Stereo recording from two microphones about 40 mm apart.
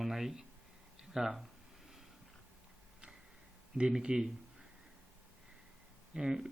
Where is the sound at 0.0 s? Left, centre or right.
Centre.